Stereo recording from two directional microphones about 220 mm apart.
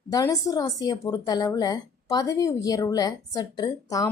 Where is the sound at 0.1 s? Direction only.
15° left (ahead or behind).